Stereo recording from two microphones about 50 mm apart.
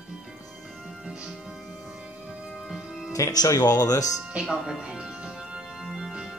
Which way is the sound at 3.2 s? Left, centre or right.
Left.